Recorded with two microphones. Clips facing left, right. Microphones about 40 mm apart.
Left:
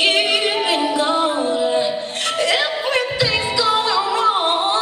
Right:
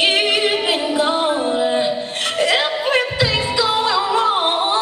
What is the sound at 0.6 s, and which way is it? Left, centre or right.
Singing, centre.